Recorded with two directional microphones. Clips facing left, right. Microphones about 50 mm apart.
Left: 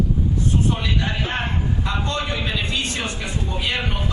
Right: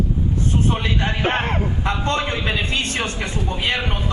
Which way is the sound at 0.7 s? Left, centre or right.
Right.